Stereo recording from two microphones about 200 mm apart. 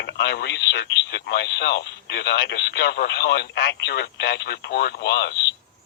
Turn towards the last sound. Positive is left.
turn(degrees=55)  # may be behind; listen again after turning